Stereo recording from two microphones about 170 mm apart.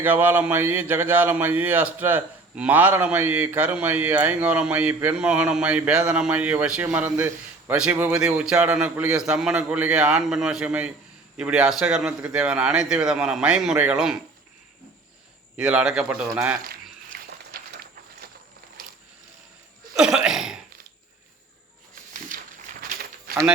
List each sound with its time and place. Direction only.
0.0 s a man's voice: 10° right (ahead or behind)
15.5 s a man's voice: 5° right (ahead or behind)
17.1 s a sound: 65° right (ahead or behind)
20.0 s a man's voice: 5° right (ahead or behind)
22.3 s walk: 55° right (ahead or behind)